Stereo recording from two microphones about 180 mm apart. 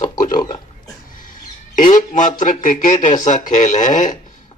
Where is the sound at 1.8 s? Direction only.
45° left (ahead or behind).